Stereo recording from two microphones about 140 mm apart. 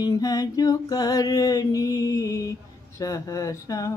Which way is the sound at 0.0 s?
25° left (ahead or behind).